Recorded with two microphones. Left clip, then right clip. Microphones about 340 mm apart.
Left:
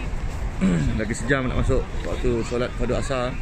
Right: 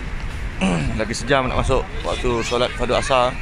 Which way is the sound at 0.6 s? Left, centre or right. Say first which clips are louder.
Right 4 dB; right.